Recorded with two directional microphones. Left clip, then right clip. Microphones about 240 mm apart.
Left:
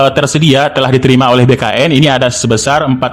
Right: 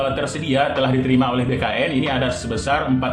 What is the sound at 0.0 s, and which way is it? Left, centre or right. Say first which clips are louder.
A man's voice: left 12 dB; left.